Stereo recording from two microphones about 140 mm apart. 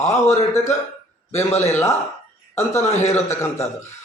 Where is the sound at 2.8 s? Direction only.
55° left (ahead or behind).